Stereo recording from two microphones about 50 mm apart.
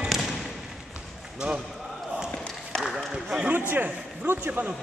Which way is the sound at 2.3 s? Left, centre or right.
Centre.